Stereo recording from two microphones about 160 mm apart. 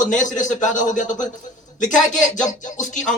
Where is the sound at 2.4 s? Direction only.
50° left (ahead or behind).